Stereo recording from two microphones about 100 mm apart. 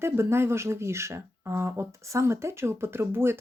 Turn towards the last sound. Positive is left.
turn(degrees=-25)  # may be behind; listen again after turning